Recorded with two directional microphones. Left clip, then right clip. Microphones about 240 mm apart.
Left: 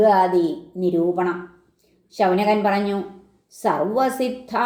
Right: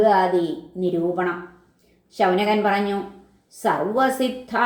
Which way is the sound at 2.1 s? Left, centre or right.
Left.